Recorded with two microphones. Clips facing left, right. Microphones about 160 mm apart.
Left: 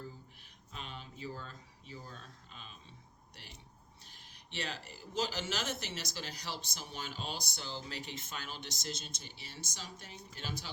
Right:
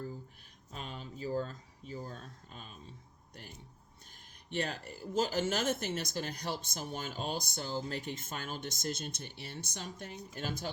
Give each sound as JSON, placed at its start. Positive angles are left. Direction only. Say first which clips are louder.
{"t": 0.7, "sound": "speech", "louder": "right 3 dB", "side_deg": -40}
{"t": 4.1, "sound": "speech", "louder": "right 9 dB", "side_deg": -50}